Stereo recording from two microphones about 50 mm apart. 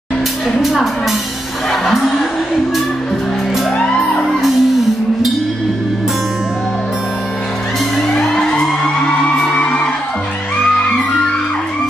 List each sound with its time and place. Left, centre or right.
4.3 s music: centre
8.1 s music: centre